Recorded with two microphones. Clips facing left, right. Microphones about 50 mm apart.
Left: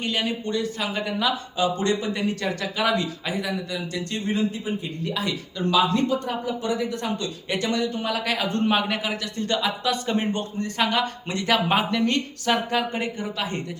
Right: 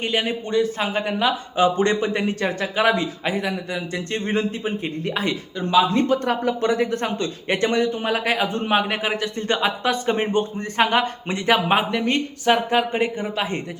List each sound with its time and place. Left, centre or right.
0.0 s speech: right
5.5 s speech: right
6.2 s speech: right